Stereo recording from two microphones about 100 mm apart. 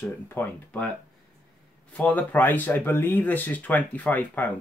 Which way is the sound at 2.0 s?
15° left (ahead or behind).